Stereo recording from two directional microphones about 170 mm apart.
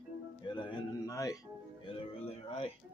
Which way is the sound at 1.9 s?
30° left (ahead or behind).